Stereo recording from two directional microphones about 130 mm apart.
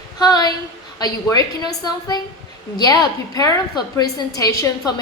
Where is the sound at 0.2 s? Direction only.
30° left (ahead or behind).